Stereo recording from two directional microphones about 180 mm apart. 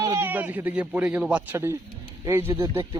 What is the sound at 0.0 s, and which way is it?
Speech, 15° right (ahead or behind).